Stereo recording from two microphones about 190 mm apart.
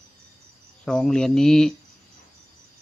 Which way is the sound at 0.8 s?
5° left (ahead or behind).